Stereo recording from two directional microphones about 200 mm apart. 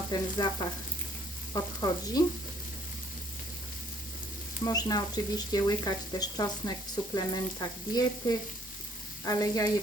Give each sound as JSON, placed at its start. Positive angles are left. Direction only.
{"t": 0.1, "sound": "speech", "side_deg": 20}
{"t": 1.5, "sound": "frying", "side_deg": 15}
{"t": 4.6, "sound": "speech", "side_deg": 20}
{"t": 9.2, "sound": "frying", "side_deg": 15}